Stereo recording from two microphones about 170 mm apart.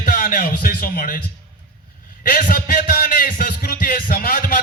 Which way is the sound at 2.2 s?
55° left (ahead or behind).